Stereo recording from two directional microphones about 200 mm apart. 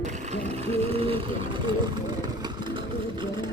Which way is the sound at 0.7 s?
30° right (ahead or behind).